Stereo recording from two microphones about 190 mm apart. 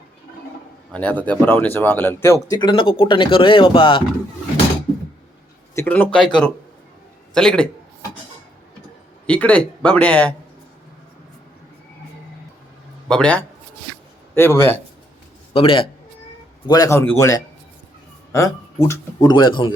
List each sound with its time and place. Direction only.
0.9 s speech: 10° left (ahead or behind); by 4.0 s 25° left (ahead or behind)
5.7 s speech: 10° left (ahead or behind)
9.2 s a man's voice: 5° left (ahead or behind)
13.1 s a man's voice: 5° left (ahead or behind)
15.5 s a man's voice: 30° left (ahead or behind)